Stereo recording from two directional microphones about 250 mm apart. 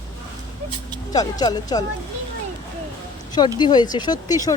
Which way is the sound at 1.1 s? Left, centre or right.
Centre.